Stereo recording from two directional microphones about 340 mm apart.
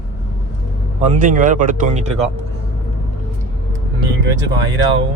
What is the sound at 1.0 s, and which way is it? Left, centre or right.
Speech, right.